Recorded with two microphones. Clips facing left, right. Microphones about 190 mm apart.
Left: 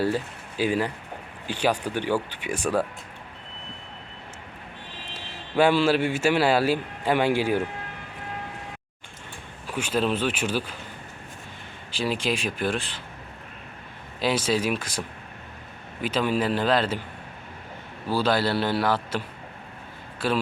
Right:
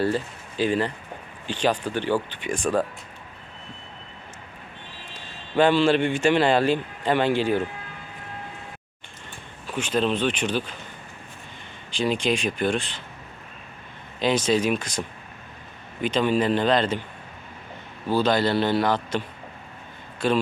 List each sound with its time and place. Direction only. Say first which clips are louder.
0.0 s a man's voice: right 1 dB; 10° left (ahead or behind)
5.5 s a man's voice: right 1 dB; 10° left (ahead or behind)
9.6 s a man's voice: right 1 dB; 10° left (ahead or behind)
11.9 s speech: right 3 dB; 5° left (ahead or behind)
14.2 s speech: right 3 dB; 5° left (ahead or behind)
18.2 s a man's voice: right 2 dB; 5° left (ahead or behind)